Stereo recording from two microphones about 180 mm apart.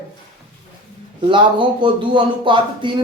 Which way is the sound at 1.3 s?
25° right (ahead or behind).